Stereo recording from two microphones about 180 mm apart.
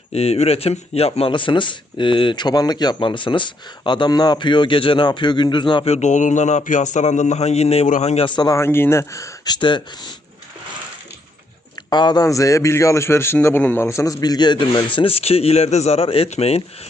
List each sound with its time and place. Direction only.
0.1 s a man's voice: 35° left (ahead or behind)
11.9 s a man's voice: 25° left (ahead or behind)